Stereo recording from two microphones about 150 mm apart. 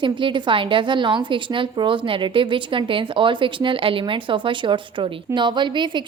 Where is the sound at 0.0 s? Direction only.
35° right (ahead or behind).